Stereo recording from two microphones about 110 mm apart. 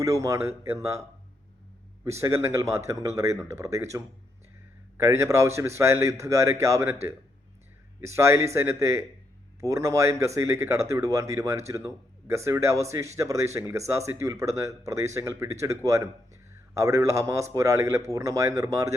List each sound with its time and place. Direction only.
0.0 s speech: 25° right (ahead or behind)
2.0 s speech: 25° right (ahead or behind)